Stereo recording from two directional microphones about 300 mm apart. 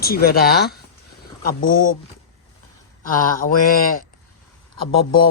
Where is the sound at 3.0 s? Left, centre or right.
Left.